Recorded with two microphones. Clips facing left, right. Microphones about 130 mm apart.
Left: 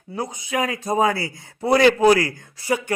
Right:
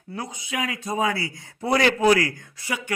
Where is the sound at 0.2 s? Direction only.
40° left (ahead or behind).